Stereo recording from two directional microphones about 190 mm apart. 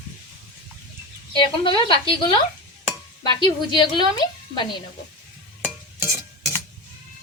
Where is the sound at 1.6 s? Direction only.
25° left (ahead or behind).